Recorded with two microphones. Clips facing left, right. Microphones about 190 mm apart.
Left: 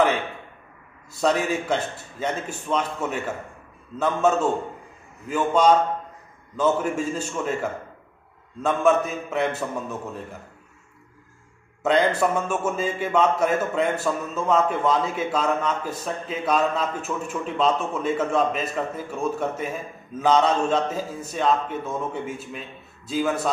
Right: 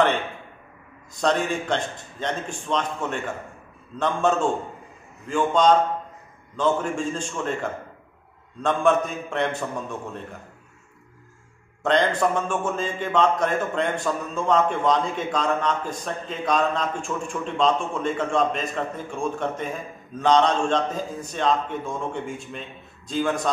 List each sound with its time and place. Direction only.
1.1 s a man's voice: 5° left (ahead or behind)
5.5 s a man's voice: 5° left (ahead or behind)
8.6 s a man's voice: 5° left (ahead or behind)
11.8 s a man's voice: 5° left (ahead or behind)